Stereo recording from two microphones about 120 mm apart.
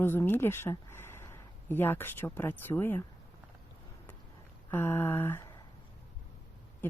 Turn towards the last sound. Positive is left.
turn(degrees=20)  # may be behind; listen again after turning